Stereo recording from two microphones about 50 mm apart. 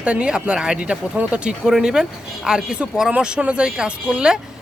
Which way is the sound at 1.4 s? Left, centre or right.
Centre.